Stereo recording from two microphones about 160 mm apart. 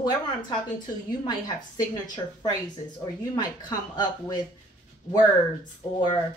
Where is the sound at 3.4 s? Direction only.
25° left (ahead or behind).